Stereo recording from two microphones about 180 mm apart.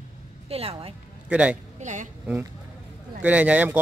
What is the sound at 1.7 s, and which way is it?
Speech, 40° right (ahead or behind).